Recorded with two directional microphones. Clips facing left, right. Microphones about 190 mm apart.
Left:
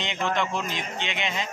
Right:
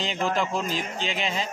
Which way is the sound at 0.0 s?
35° right (ahead or behind).